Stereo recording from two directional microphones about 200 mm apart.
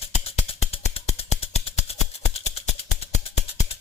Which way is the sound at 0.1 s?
30° left (ahead or behind).